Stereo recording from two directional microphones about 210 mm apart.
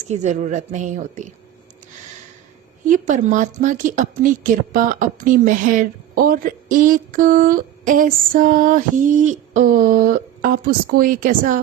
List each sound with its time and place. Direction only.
0.1 s a woman's voice: 35° right (ahead or behind)
2.8 s a woman's voice: 40° right (ahead or behind)